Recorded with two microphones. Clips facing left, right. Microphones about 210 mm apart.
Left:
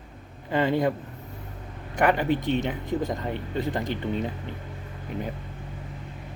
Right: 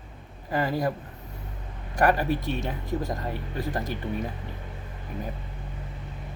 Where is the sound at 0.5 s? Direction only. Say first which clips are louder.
Left 3 dB; 25° left (ahead or behind).